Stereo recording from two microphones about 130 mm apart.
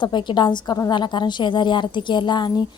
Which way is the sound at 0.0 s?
35° left (ahead or behind).